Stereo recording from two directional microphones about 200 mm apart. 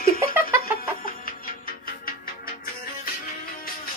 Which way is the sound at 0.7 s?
45° left (ahead or behind).